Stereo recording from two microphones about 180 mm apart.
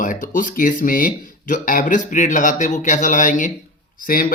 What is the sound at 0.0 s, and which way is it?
Speech, 45° left (ahead or behind).